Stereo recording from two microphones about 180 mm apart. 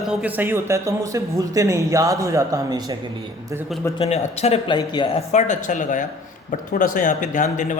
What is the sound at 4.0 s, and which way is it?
Speech, 35° left (ahead or behind).